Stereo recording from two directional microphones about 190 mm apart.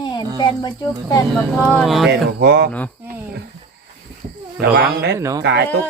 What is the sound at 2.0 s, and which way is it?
Speech, 60° right (ahead or behind).